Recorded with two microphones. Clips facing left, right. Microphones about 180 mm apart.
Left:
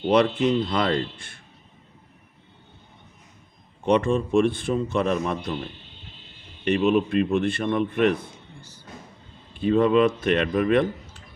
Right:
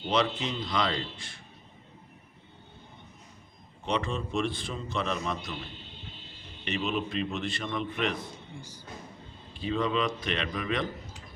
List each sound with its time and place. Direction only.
0.1 s speech: 55° left (ahead or behind)
3.8 s a man's voice: 55° left (ahead or behind)
6.7 s a man's voice: 50° left (ahead or behind)
9.6 s a man's voice: 55° left (ahead or behind)